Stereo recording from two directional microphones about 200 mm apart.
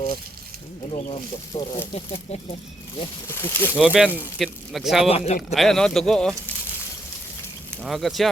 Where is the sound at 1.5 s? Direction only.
30° left (ahead or behind).